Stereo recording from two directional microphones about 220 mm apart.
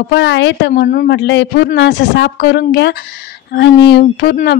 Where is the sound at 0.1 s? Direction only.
55° left (ahead or behind).